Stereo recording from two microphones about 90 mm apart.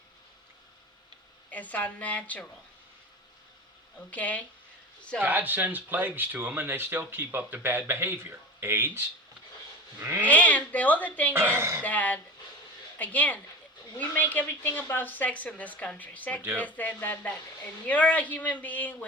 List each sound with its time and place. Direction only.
1.5 s speech: 15° left (ahead or behind)
4.1 s speech: 15° left (ahead or behind)
5.2 s speech: 20° right (ahead or behind)
10.2 s speech: 15° left (ahead or behind)
11.3 s speech: 25° right (ahead or behind)
11.8 s speech: 15° left (ahead or behind)
16.4 s speech: 25° right (ahead or behind)
16.6 s speech: 20° left (ahead or behind)